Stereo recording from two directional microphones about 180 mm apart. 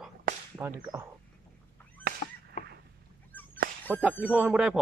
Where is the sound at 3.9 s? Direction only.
10° left (ahead or behind).